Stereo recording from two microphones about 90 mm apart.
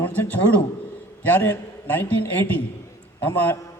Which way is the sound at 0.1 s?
20° left (ahead or behind).